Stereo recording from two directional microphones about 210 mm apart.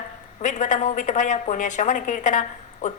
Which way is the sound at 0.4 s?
35° left (ahead or behind).